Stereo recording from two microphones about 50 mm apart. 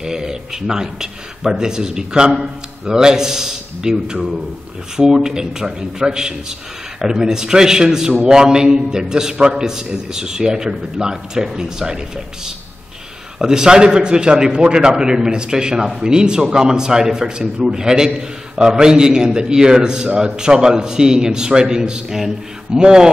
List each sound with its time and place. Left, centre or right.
0.0 s a man's voice: centre
13.4 s a man's voice: centre